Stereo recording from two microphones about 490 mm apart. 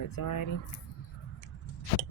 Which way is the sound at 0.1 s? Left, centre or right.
Left.